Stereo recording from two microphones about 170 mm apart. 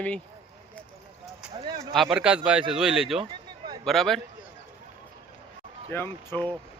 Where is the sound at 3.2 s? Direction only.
25° right (ahead or behind).